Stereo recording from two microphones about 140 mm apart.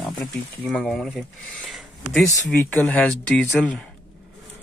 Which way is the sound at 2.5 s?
10° left (ahead or behind).